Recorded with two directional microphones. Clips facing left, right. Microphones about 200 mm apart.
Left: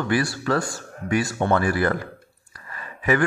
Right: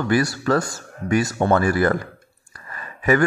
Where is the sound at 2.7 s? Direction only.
40° right (ahead or behind).